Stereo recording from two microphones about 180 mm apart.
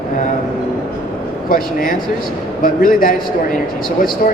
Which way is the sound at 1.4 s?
50° left (ahead or behind).